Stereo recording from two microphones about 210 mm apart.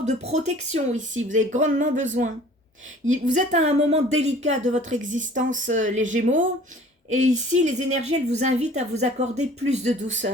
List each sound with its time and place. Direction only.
0.0 s speech: 30° right (ahead or behind)
3.1 s speech: 35° right (ahead or behind)